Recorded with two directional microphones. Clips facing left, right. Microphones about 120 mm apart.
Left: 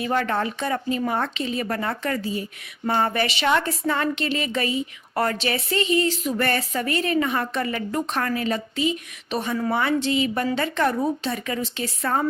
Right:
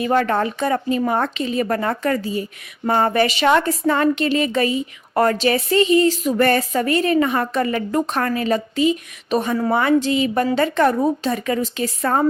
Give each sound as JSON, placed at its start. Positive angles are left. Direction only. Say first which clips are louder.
{"t": 0.0, "sound": "a woman's voice", "louder": "right 5 dB", "side_deg": -45}